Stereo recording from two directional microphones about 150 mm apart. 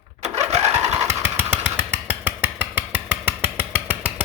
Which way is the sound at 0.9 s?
15° right (ahead or behind).